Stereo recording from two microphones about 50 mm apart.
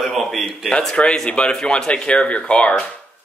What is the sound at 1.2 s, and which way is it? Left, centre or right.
Speech, centre.